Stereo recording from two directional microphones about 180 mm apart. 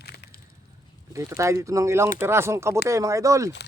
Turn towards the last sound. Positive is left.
turn(degrees=-15)  # may be behind; listen again after turning